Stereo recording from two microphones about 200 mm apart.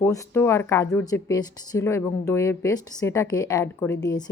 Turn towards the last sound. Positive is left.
turn(degrees=15)  # may be behind; listen again after turning